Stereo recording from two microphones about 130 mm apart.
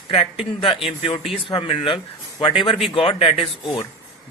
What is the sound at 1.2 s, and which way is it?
A man's voice, 45° left (ahead or behind).